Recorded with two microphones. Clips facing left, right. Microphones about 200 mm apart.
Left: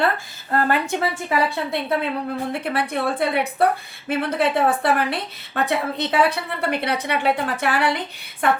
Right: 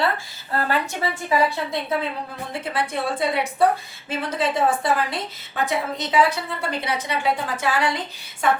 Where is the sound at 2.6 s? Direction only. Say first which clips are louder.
Right 2 dB; 60° left (ahead or behind).